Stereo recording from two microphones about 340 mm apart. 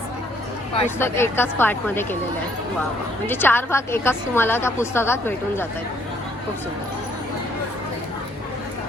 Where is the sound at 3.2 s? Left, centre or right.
Centre.